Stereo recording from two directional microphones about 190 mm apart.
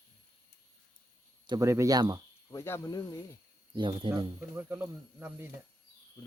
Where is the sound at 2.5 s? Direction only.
15° left (ahead or behind).